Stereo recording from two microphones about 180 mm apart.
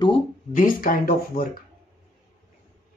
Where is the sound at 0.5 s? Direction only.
50° left (ahead or behind).